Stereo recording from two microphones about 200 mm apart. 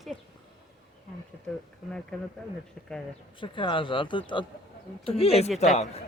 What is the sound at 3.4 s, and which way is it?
A man's voice, 25° left (ahead or behind).